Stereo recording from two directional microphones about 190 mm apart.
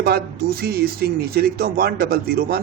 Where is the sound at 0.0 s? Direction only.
55° right (ahead or behind).